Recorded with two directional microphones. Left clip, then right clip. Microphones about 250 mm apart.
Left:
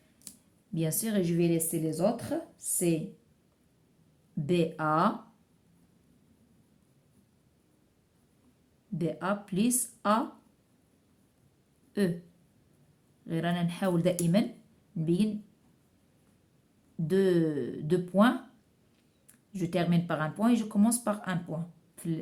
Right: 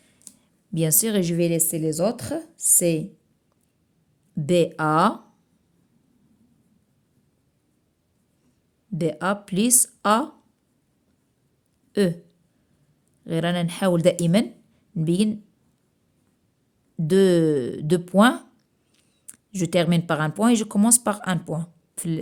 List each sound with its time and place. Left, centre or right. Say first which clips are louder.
0.3 s a sound: right 2 dB; centre
0.7 s speech: right 9 dB; right
4.4 s speech: right 8 dB; right
9.0 s speech: right 8 dB; right
11.9 s speech: right 9 dB; right
13.2 s speech: right 8 dB; right
17.1 s speech: right 9 dB; right